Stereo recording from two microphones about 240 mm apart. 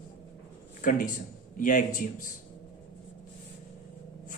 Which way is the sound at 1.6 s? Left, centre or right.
Left.